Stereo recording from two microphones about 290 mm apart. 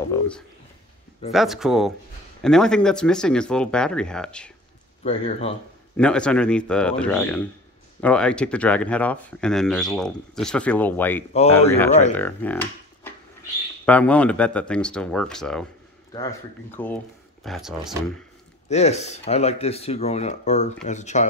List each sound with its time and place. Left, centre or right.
1.3 s speech: centre
5.0 s speech: left
5.9 s speech: centre
18.7 s speech: left